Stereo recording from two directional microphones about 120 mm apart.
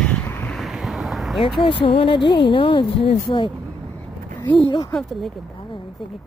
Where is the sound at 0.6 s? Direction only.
Centre (ahead or behind).